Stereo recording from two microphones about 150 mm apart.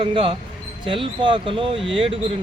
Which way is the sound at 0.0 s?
35° right (ahead or behind).